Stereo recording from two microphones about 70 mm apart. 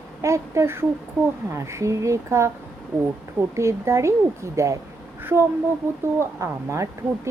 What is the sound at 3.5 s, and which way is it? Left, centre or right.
A woman's voice, right.